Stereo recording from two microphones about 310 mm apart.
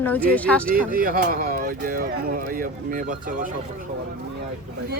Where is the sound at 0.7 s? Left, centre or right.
Right.